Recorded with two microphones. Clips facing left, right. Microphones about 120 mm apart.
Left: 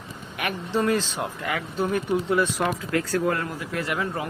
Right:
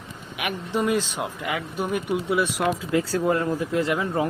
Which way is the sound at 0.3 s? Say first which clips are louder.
Even; 10° right (ahead or behind).